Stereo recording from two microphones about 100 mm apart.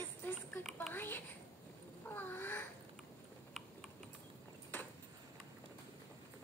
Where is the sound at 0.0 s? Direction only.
20° left (ahead or behind).